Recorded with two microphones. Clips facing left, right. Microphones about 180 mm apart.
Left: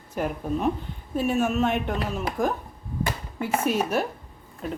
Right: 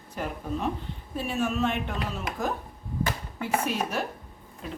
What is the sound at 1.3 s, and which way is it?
Speech, 45° left (ahead or behind).